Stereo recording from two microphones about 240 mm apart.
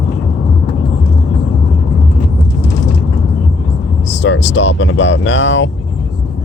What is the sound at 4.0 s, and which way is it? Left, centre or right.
Speech, left.